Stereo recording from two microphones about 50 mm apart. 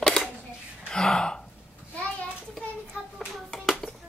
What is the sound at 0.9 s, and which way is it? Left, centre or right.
Gasp, centre.